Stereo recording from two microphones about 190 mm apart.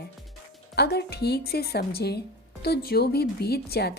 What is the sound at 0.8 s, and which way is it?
Speech, 60° left (ahead or behind).